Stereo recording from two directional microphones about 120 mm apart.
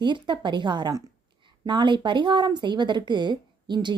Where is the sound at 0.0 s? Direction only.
40° right (ahead or behind).